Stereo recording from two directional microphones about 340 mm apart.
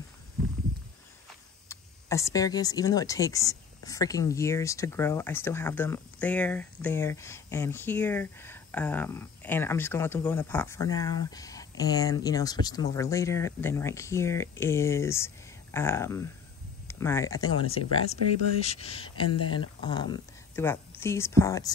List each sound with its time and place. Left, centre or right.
1.7 s speech: centre
17.4 s speech: left
18.6 s speech: centre